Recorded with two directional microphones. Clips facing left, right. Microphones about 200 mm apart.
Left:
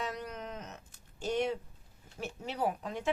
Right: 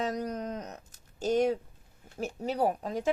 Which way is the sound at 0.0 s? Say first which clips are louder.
Right 7 dB; 40° right (ahead or behind).